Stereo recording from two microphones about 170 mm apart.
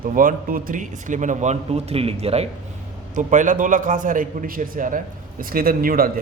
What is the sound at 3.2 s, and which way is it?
A man's voice, 45° right (ahead or behind).